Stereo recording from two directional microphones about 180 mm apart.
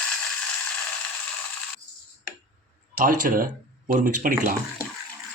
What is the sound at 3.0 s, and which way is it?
Speech, 50° right (ahead or behind).